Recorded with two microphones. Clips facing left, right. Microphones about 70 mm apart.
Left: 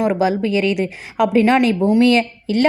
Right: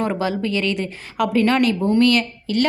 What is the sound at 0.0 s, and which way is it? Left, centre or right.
A woman's voice, centre.